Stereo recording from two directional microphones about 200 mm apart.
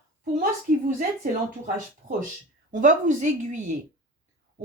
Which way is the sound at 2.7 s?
40° right (ahead or behind).